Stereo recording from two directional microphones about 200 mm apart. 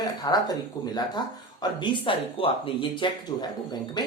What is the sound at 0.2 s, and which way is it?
Speech, 20° left (ahead or behind).